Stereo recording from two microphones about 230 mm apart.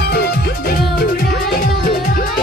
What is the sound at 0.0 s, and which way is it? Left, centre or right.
Music, left.